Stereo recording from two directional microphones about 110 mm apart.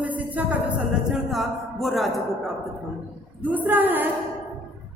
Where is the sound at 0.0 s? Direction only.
15° right (ahead or behind).